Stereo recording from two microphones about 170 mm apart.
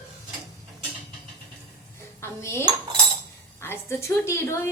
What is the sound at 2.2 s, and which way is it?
Dishes, 15° left (ahead or behind).